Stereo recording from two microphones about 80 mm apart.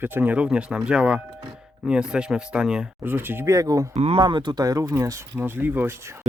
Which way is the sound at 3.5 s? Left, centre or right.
Right.